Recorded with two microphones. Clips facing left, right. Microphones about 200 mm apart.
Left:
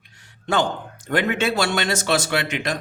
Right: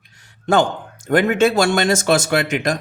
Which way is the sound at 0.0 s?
45° right (ahead or behind).